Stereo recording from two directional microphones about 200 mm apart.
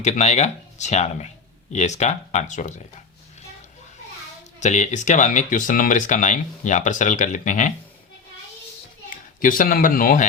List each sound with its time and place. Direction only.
0.0 s speech: 35° left (ahead or behind)
4.6 s speech: 35° left (ahead or behind)
9.0 s a man's voice: 40° left (ahead or behind)